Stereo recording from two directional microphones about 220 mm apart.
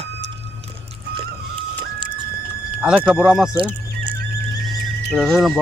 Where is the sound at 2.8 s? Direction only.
5° right (ahead or behind).